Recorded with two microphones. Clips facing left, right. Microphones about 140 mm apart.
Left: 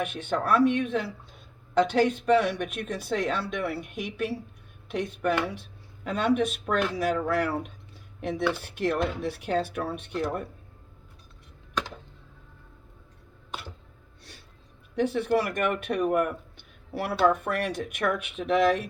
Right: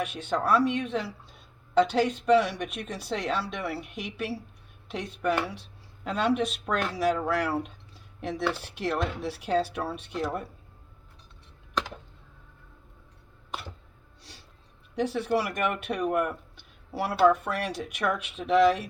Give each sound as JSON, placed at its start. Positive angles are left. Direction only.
{"t": 0.0, "sound": "speech", "side_deg": 55}
{"t": 14.9, "sound": "speech", "side_deg": 55}